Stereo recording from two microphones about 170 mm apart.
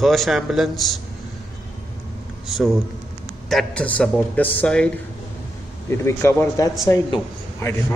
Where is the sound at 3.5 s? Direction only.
5° left (ahead or behind).